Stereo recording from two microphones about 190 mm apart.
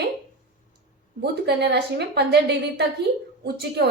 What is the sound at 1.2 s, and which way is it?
A woman's voice, 60° right (ahead or behind).